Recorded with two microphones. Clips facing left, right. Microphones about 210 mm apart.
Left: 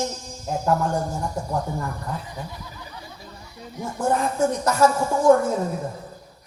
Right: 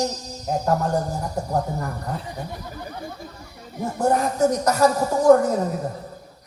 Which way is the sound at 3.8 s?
40° right (ahead or behind).